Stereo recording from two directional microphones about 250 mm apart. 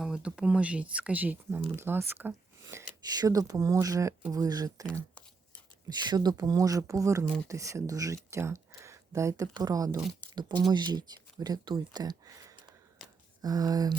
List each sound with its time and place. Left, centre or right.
0.0 s speech: centre
6.1 s speech: centre